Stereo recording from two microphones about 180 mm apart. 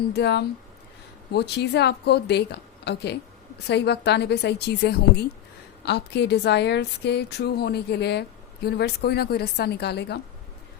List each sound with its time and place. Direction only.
0.1 s a woman's voice: 70° left (ahead or behind)